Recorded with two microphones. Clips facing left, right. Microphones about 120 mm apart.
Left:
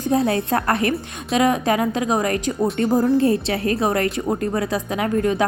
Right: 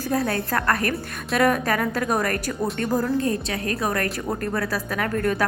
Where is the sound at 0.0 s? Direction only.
25° left (ahead or behind).